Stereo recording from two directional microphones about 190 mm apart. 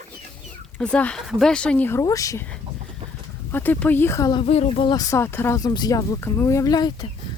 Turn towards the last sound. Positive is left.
turn(degrees=20)  # may be behind; listen again after turning